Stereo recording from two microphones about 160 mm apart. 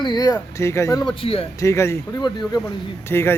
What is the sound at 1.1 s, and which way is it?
Speech, 35° left (ahead or behind).